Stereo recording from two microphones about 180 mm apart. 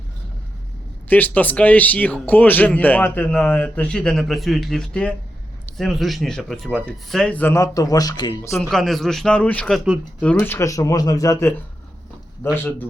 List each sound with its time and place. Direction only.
1.1 s speech: 10° left (ahead or behind)
8.7 s speech: centre (ahead or behind)
10.2 s speech: 10° left (ahead or behind)